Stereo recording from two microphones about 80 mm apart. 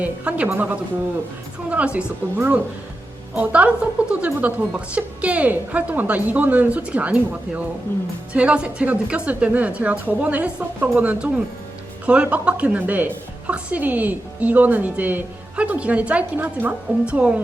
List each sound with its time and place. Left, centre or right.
0.0 s a woman's voice: centre